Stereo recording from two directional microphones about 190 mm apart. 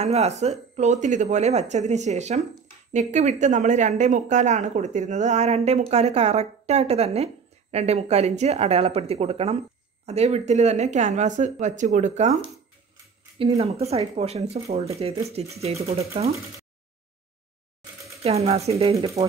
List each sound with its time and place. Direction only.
0.0 s speech: 35° right (ahead or behind)
18.2 s speech: 30° right (ahead or behind)